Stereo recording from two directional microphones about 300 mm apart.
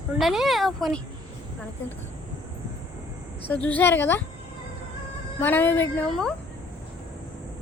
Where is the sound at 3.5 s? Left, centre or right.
Centre.